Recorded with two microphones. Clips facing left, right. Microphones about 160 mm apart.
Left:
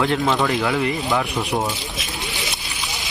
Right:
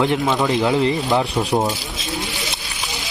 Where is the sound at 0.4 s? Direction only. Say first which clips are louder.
Right 3 dB; 20° right (ahead or behind).